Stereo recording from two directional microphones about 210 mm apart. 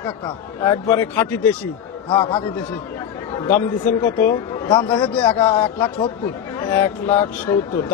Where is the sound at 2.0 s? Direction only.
25° left (ahead or behind).